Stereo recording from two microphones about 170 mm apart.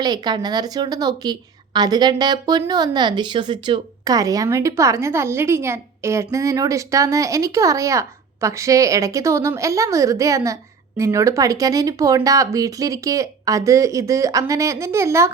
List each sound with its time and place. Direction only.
0.0 s a woman's voice: 25° right (ahead or behind)